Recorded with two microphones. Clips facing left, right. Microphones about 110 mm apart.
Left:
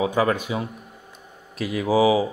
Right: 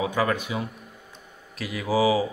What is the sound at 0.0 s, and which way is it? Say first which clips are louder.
Speech: left 3 dB; 25° left (ahead or behind).